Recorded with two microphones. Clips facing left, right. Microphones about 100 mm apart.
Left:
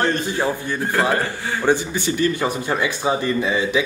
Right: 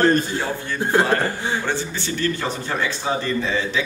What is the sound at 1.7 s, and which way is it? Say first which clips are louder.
Speech: left 6 dB; 15° left (ahead or behind).